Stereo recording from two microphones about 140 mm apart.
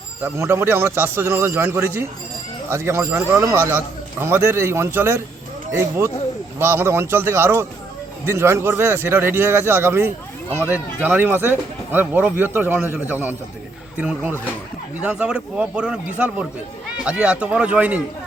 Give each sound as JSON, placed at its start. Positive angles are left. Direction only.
{"t": 0.2, "sound": "speech", "side_deg": -20}
{"t": 6.6, "sound": "speech", "side_deg": -15}